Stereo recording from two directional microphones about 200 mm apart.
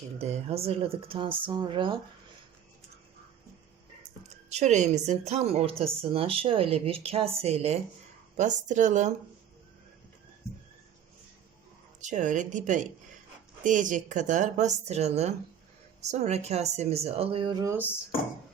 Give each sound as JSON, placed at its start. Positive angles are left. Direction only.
{"t": 0.2, "sound": "speech", "side_deg": -30}
{"t": 4.4, "sound": "a woman's voice", "side_deg": -35}
{"t": 11.9, "sound": "a woman's voice", "side_deg": -40}